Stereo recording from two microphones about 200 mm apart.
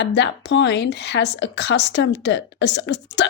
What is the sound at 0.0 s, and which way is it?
A woman's voice, 60° left (ahead or behind).